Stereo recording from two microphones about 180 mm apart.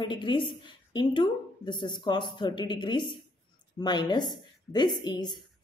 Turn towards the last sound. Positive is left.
turn(degrees=25)  # may be behind; listen again after turning